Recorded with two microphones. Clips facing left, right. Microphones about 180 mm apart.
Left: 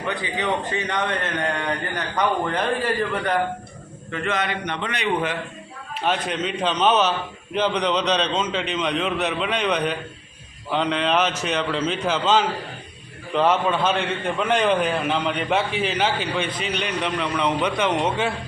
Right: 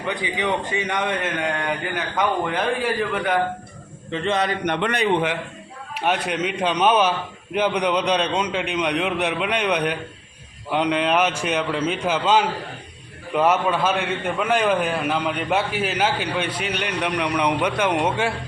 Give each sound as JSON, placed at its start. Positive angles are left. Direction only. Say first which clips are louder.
{"t": 0.1, "sound": "a man's voice", "louder": "right 1 dB", "side_deg": -15}
{"t": 4.1, "sound": "a man's voice", "louder": "right 3 dB", "side_deg": -30}
{"t": 4.6, "sound": "a man's voice", "louder": "right 6 dB", "side_deg": -55}
{"t": 6.0, "sound": "a man's voice", "louder": "right 1 dB", "side_deg": -10}